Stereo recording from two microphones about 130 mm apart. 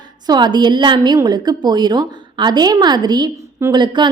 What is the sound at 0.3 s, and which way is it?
A woman's voice, 35° right (ahead or behind).